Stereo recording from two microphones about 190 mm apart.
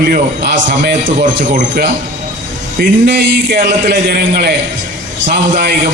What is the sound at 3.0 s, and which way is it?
A man's voice, 70° right (ahead or behind).